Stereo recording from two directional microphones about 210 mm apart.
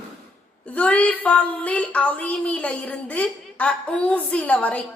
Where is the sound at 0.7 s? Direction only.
5° left (ahead or behind).